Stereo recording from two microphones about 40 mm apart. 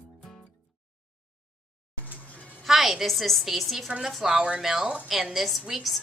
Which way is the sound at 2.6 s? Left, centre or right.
Centre.